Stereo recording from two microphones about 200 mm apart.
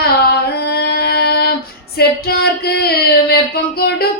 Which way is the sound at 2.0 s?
50° left (ahead or behind).